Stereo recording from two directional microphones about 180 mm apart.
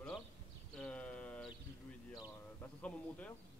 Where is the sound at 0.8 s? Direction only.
5° left (ahead or behind).